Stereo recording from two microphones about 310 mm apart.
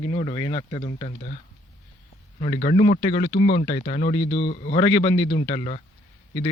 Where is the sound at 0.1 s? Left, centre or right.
Centre.